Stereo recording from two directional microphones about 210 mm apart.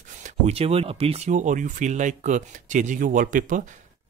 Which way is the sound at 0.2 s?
30° right (ahead or behind).